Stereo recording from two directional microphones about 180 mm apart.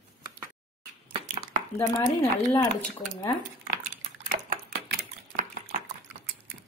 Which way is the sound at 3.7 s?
50° right (ahead or behind).